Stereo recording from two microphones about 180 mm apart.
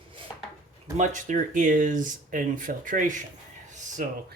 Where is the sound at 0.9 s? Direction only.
45° right (ahead or behind).